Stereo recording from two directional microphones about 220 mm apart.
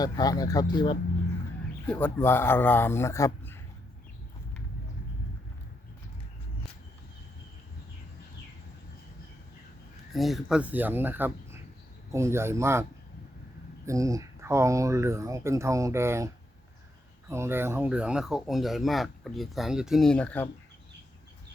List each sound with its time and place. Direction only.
0.0 s speech: 15° left (ahead or behind)
1.9 s speech: 10° left (ahead or behind)
10.1 s speech: centre (ahead or behind)
13.8 s speech: 15° right (ahead or behind); by 20.5 s 5° left (ahead or behind)